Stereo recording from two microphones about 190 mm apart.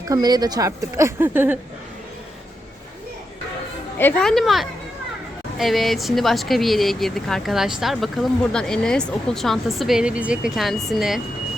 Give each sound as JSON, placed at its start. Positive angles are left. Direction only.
{"t": 0.1, "sound": "speech", "side_deg": -20}
{"t": 3.9, "sound": "speech", "side_deg": 10}